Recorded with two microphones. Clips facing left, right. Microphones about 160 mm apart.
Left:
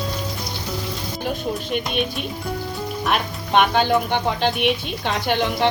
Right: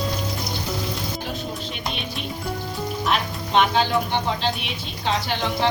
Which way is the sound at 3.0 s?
55° left (ahead or behind).